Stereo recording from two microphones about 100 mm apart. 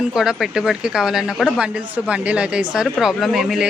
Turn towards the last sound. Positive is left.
turn(degrees=0)  # may be behind; listen again after turning